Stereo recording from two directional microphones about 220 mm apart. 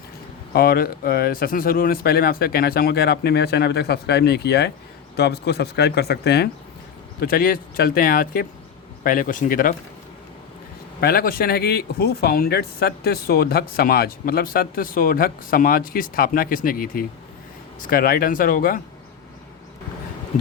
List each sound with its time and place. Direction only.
0.5 s speech: 45° left (ahead or behind)
11.0 s speech: 45° left (ahead or behind)